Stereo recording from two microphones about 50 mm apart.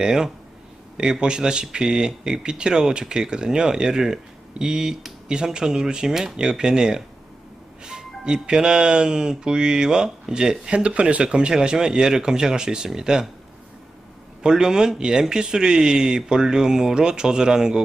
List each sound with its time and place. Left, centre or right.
0.0 s speech: centre
14.4 s speech: centre